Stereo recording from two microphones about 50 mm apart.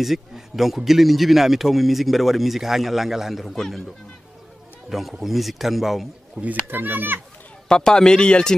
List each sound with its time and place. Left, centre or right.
0.0 s a man's voice: centre
3.4 s a man's voice: centre
6.7 s speech: right
7.6 s speech: centre